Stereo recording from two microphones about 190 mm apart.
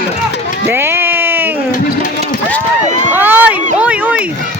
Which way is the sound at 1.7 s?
40° left (ahead or behind).